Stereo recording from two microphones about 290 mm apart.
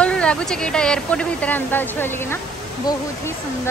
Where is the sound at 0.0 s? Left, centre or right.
Centre.